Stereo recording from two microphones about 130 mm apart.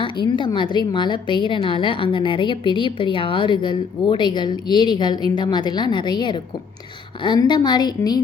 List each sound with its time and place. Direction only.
0.0 s a woman's voice: 40° left (ahead or behind)